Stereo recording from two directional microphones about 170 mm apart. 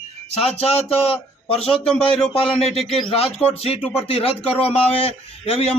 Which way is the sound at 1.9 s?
5° left (ahead or behind).